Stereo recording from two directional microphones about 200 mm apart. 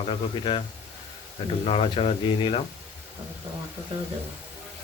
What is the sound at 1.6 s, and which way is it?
Speech, 30° left (ahead or behind).